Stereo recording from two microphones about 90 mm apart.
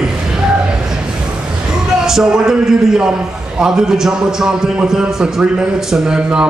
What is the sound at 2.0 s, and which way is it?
A man's voice, 5° right (ahead or behind).